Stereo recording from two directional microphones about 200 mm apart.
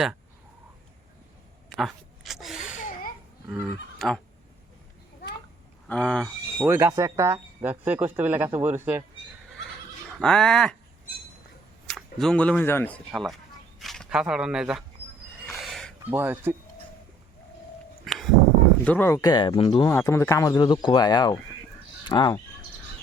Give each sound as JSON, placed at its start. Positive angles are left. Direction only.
{"t": 1.7, "sound": "a sound", "side_deg": 0}
{"t": 2.6, "sound": "a sound", "side_deg": 40}
{"t": 3.9, "sound": "speech", "side_deg": 0}
{"t": 5.9, "sound": "speech", "side_deg": 5}
{"t": 6.7, "sound": "speech", "side_deg": -15}
{"t": 10.2, "sound": "speech", "side_deg": 5}
{"t": 11.9, "sound": "speech", "side_deg": 0}
{"t": 15.4, "sound": "a sound", "side_deg": 0}
{"t": 16.1, "sound": "speech", "side_deg": -10}
{"t": 18.0, "sound": "a sound", "side_deg": 0}
{"t": 18.9, "sound": "speech", "side_deg": 10}
{"t": 19.9, "sound": "speech", "side_deg": 15}